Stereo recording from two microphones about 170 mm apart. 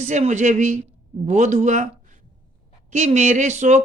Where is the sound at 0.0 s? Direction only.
45° right (ahead or behind).